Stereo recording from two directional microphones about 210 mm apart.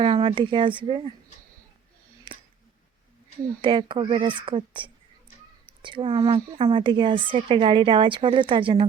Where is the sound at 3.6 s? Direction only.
25° right (ahead or behind).